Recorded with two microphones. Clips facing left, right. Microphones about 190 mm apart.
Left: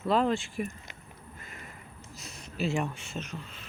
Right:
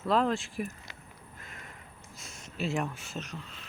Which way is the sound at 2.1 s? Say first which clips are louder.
Left 3 dB; 50° right (ahead or behind).